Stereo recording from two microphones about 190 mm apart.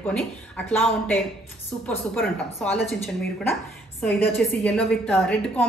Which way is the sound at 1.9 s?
5° left (ahead or behind).